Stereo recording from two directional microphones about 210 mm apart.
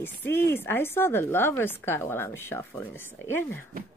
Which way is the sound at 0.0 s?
10° left (ahead or behind).